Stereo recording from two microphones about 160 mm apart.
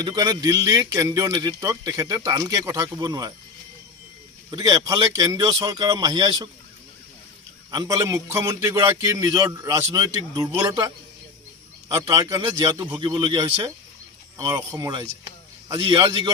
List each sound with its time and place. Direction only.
0.0 s speech: 25° right (ahead or behind)
4.5 s speech: 25° right (ahead or behind)
7.7 s speech: 20° right (ahead or behind)
11.9 s speech: 25° right (ahead or behind)